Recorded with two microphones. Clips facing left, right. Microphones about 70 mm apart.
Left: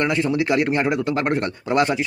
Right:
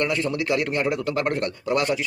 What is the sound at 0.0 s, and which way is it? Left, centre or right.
A man's voice, left.